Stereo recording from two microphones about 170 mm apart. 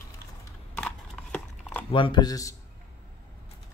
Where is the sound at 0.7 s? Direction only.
5° left (ahead or behind).